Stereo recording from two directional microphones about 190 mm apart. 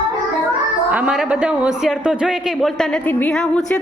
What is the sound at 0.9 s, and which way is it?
A man's voice, 5° right (ahead or behind).